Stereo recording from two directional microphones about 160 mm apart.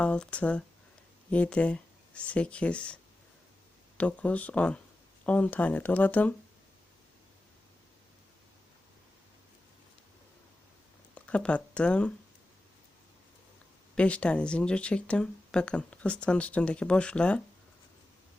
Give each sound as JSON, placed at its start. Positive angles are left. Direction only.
{"t": 0.0, "sound": "speech", "side_deg": 5}
{"t": 11.1, "sound": "speech", "side_deg": 10}
{"t": 13.9, "sound": "speech", "side_deg": 5}